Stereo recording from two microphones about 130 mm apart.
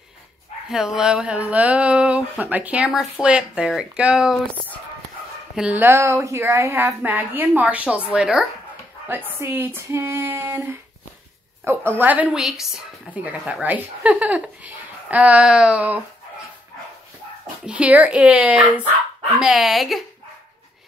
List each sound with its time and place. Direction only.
0.7 s a woman's voice: 5° right (ahead or behind)
5.6 s a woman's voice: 15° right (ahead or behind)
9.0 s a woman's voice: 15° right (ahead or behind)
17.6 s a woman's voice: 10° right (ahead or behind)